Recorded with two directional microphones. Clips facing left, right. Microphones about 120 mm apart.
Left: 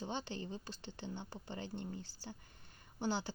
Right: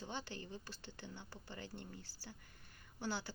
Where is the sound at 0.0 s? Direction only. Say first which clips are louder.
Left 5 dB; 20° left (ahead or behind).